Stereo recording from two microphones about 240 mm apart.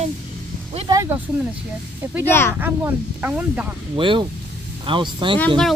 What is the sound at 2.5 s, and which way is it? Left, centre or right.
Speech, centre.